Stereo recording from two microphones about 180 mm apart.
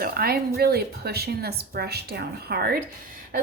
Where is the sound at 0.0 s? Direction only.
55° right (ahead or behind).